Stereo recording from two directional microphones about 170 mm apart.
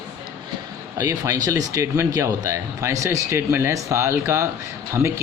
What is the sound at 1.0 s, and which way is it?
A man's voice, 20° right (ahead or behind).